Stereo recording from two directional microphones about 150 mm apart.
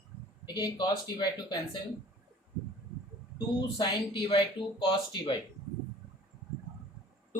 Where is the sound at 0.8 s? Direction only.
30° left (ahead or behind).